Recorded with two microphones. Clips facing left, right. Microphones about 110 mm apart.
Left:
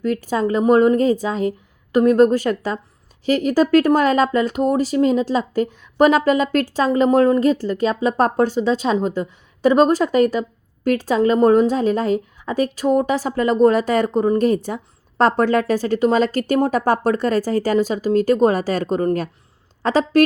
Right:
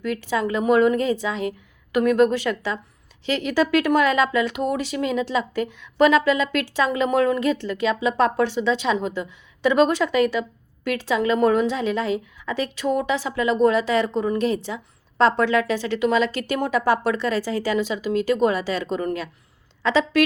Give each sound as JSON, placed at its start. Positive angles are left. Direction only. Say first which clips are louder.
{"t": 0.0, "sound": "speech", "louder": "left 4 dB", "side_deg": 40}